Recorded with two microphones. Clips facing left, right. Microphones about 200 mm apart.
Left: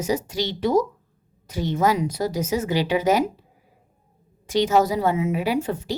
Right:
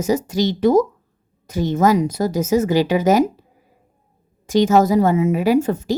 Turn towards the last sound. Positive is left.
turn(degrees=-45)  # may be behind; listen again after turning